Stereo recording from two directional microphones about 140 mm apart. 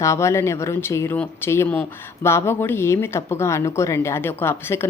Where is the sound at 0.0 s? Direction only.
20° left (ahead or behind).